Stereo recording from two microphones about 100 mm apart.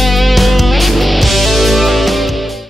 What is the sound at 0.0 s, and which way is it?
Music, centre (ahead or behind).